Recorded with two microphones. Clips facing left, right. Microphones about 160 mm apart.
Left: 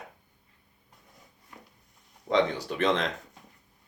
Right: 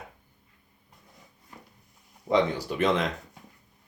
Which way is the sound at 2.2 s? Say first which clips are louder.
Right 1 dB; 10° right (ahead or behind).